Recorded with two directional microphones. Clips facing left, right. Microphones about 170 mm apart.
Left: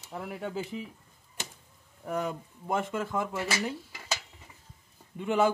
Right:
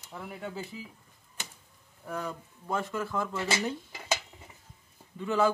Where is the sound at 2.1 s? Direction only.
20° left (ahead or behind).